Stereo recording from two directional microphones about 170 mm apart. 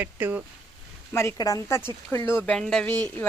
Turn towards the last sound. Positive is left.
turn(degrees=10)  # may be behind; listen again after turning